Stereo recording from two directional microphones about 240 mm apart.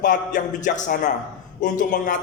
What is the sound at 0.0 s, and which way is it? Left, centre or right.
A man's voice, left.